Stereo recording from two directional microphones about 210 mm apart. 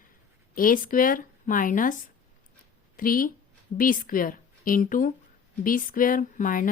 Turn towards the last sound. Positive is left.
turn(degrees=40)  # may be behind; listen again after turning